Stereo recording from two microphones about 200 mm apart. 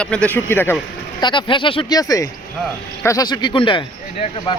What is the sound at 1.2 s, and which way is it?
Speech, 25° left (ahead or behind).